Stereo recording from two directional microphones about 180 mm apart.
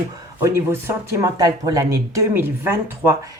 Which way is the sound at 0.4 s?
15° right (ahead or behind).